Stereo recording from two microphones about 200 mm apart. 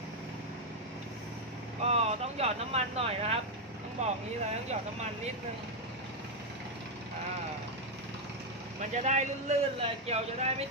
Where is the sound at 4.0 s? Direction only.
35° right (ahead or behind).